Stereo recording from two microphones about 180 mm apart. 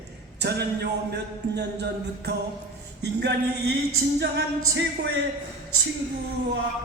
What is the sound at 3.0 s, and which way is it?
Speech, 65° right (ahead or behind).